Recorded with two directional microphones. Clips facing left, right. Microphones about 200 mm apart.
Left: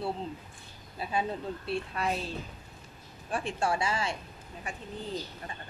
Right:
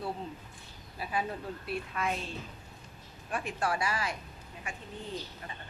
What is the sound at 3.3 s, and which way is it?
Speech, 30° left (ahead or behind).